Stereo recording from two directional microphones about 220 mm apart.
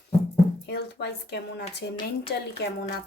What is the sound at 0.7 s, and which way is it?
Speech, 50° left (ahead or behind).